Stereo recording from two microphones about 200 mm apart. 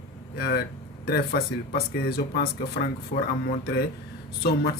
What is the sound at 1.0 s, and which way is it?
Speech, 50° left (ahead or behind).